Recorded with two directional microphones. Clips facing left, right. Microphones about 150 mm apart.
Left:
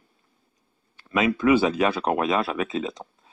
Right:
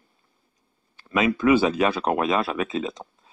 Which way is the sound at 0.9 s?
35° right (ahead or behind).